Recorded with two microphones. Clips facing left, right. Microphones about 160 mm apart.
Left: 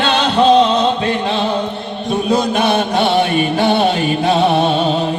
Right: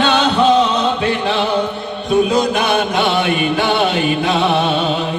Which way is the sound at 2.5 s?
30° left (ahead or behind).